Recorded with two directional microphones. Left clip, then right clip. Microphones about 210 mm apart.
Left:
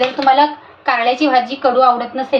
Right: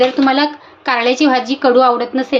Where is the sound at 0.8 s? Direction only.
50° right (ahead or behind).